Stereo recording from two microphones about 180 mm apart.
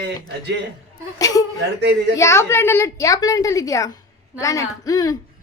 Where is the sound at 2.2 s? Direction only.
15° left (ahead or behind).